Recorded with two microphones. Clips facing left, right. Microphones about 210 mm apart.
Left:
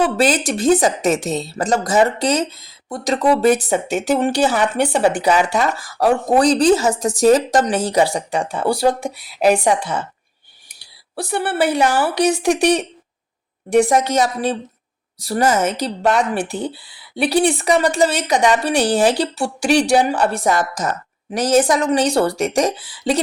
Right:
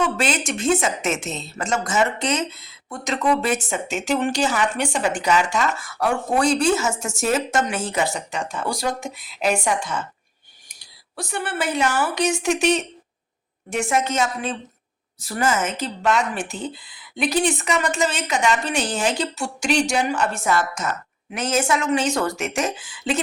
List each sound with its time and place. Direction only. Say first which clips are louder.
0.0 s speech: left 6 dB; 35° left (ahead or behind)
11.1 s speech: left 6 dB; 35° left (ahead or behind)